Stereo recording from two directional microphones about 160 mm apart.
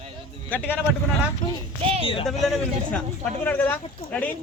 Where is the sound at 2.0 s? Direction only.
35° left (ahead or behind).